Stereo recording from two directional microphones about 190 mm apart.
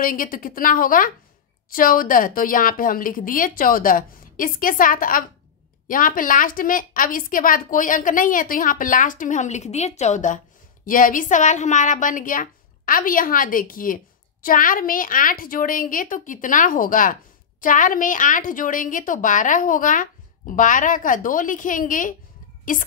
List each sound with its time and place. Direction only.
0.0 s a woman's voice: 45° left (ahead or behind)